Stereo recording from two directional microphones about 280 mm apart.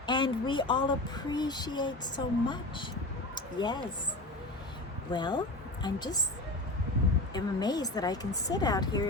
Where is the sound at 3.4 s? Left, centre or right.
Centre.